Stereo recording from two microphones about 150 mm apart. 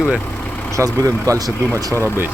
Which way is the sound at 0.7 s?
20° right (ahead or behind).